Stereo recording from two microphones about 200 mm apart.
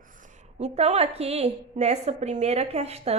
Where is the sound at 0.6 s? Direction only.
35° right (ahead or behind).